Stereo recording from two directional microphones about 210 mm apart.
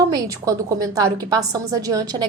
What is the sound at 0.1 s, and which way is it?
A woman's voice, 15° right (ahead or behind).